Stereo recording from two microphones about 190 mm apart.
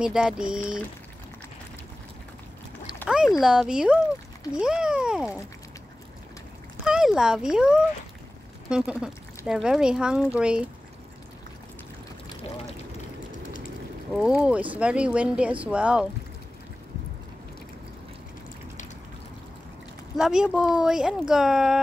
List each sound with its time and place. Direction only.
0.0 s speech: 5° right (ahead or behind)
3.1 s speech: centre (ahead or behind)
6.8 s speech: 5° right (ahead or behind)
13.4 s vehicle: 45° left (ahead or behind)
14.1 s speech: 5° right (ahead or behind)
20.2 s speech: 5° right (ahead or behind)